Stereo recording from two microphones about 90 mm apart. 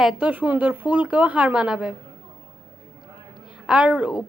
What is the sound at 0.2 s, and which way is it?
A woman's voice, 15° right (ahead or behind).